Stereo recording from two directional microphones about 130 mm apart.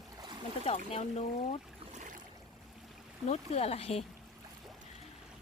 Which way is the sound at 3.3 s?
55° left (ahead or behind).